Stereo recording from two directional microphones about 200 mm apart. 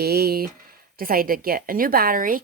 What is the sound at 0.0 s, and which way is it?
A woman's voice, 50° right (ahead or behind).